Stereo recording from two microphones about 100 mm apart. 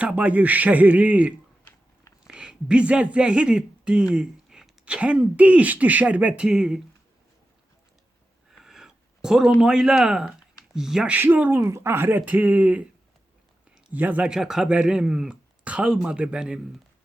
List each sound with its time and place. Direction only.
0.0 s a man's voice: 15° right (ahead or behind)
8.4 s a sound: 5° right (ahead or behind)
10.8 s a man's voice: 5° right (ahead or behind)